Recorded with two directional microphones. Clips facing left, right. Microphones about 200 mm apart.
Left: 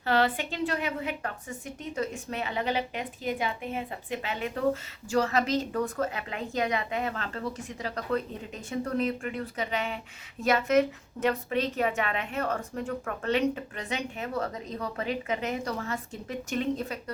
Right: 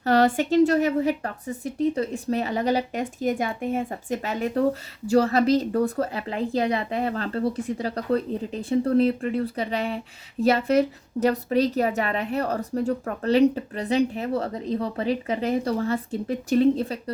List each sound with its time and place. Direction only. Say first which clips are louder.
0.0 s a woman's voice: right 6 dB; 40° right (ahead or behind)